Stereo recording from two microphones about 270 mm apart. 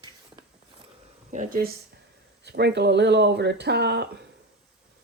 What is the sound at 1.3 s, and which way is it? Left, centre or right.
Speech, right.